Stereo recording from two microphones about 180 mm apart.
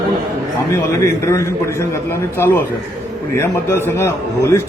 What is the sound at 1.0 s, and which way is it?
Speech, 15° left (ahead or behind).